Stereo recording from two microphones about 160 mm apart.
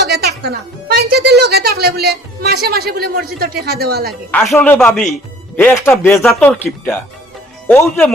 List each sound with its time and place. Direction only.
0.1 s speech: 80° right
4.3 s a man's voice: 10° left (ahead or behind)
6.2 s a man's voice: 5° left (ahead or behind)